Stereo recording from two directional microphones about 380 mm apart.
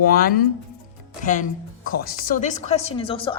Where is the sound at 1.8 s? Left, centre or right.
Left.